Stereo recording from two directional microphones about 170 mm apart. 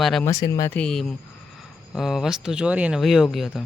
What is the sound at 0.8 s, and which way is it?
Speech, 5° left (ahead or behind).